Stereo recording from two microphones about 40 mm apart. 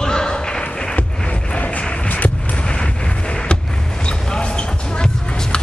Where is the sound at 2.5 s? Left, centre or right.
Left.